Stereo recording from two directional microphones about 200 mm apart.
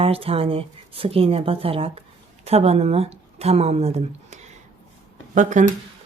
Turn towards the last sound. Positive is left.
turn(degrees=-40)  # may be behind; listen again after turning